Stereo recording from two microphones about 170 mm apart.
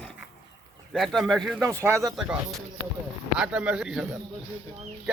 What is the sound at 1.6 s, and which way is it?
Speech, 15° right (ahead or behind).